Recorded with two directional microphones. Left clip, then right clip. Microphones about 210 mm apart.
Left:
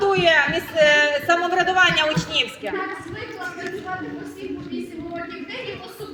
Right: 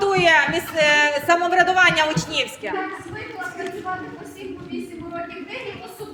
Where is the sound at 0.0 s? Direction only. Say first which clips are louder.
Right 1 dB; 25° right (ahead or behind).